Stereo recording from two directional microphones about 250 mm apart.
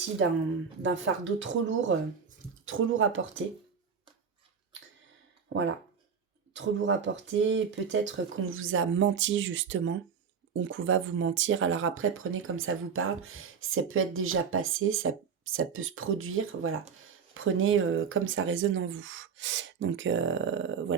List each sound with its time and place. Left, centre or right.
0.8 s speech: right
6.5 s speech: right